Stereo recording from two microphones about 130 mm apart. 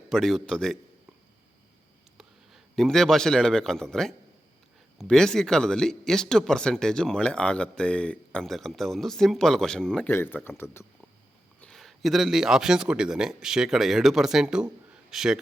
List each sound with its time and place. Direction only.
0.1 s speech: 5° left (ahead or behind)
2.1 s a man's voice: centre (ahead or behind)
10.1 s speech: 15° left (ahead or behind)
11.6 s speech: centre (ahead or behind)